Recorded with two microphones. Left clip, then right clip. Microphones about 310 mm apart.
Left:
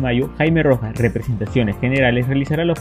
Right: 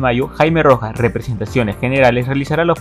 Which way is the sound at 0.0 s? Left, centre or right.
Right.